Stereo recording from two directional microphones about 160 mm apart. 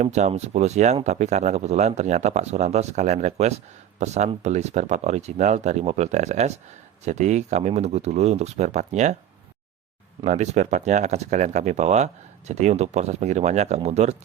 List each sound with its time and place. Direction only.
0.0 s speech: 45° right (ahead or behind)
10.2 s speech: 45° right (ahead or behind)